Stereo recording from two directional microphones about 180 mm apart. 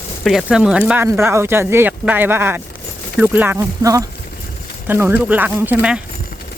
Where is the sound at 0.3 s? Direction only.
Centre (ahead or behind).